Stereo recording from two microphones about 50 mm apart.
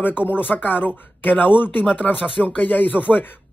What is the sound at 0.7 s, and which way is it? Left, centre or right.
Speech, left.